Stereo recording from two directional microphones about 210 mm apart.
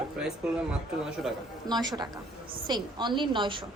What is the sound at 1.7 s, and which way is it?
A woman's voice, 20° right (ahead or behind).